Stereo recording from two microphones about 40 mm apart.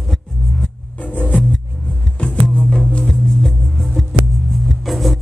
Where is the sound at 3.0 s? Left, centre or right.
Centre.